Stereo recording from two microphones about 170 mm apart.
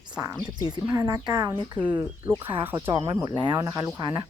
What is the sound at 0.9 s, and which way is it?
Speech, 20° right (ahead or behind).